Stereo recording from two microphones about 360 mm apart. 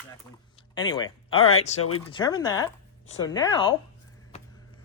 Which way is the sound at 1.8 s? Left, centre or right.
Left.